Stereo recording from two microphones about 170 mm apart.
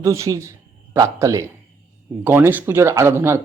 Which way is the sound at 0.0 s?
20° right (ahead or behind).